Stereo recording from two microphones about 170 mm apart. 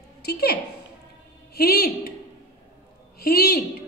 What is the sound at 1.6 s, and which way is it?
Speech, 65° left (ahead or behind).